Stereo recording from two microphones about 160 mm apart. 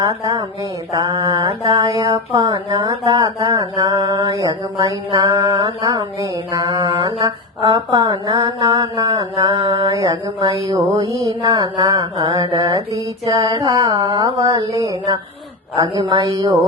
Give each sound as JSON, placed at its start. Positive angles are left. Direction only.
{"t": 0.0, "sound": "speech", "side_deg": -20}
{"t": 9.8, "sound": "speech", "side_deg": -20}